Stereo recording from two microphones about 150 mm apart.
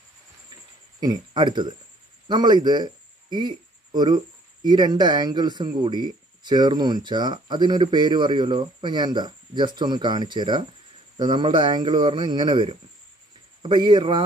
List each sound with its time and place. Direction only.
1.0 s speech: 30° right (ahead or behind)